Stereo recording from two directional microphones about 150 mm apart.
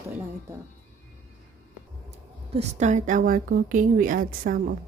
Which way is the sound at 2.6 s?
50° right (ahead or behind).